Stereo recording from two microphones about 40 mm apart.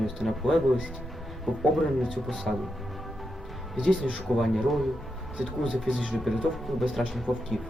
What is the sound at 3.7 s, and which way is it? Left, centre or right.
Speech, centre.